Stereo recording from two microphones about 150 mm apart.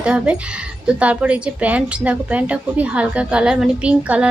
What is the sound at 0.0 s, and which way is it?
A woman's voice, 5° right (ahead or behind).